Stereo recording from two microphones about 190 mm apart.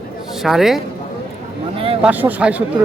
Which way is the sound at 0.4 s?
Centre (ahead or behind).